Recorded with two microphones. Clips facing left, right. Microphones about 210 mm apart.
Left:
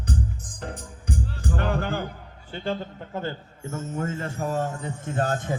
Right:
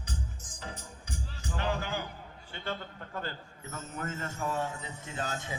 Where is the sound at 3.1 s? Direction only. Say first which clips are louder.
Left 8 dB; 20° left (ahead or behind).